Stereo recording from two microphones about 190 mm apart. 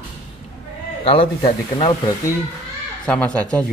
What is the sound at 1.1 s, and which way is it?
Speech, 30° left (ahead or behind).